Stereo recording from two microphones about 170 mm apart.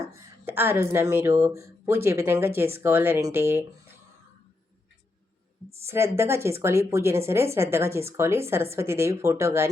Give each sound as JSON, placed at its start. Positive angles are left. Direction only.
{"t": 0.4, "sound": "speech", "side_deg": -15}
{"t": 5.7, "sound": "speech", "side_deg": -15}